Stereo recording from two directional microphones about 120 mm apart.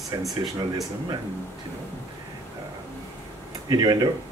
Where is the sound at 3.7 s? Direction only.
35° right (ahead or behind).